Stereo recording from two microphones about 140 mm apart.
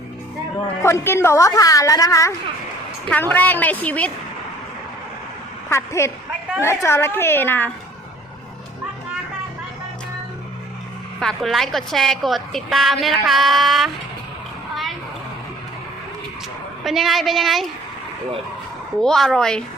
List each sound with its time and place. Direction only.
0.8 s a woman's voice: 20° left (ahead or behind)
3.1 s a woman's voice: 15° left (ahead or behind)
5.6 s a woman's voice: 20° left (ahead or behind)
11.2 s a woman's voice: centre (ahead or behind)
16.8 s a woman's voice: centre (ahead or behind)
19.0 s a woman's voice: centre (ahead or behind)